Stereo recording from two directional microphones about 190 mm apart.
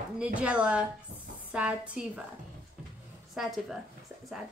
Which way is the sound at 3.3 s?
Centre (ahead or behind).